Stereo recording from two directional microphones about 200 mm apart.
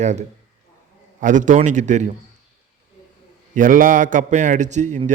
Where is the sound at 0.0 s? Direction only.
35° right (ahead or behind).